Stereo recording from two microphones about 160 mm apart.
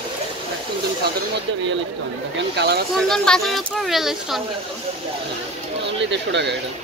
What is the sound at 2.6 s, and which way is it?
Speech, 90° right.